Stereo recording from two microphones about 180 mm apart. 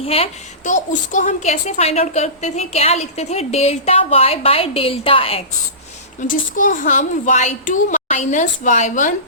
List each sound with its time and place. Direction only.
0.0 s a woman's voice: 35° left (ahead or behind)
6.2 s a child's voice: 45° left (ahead or behind)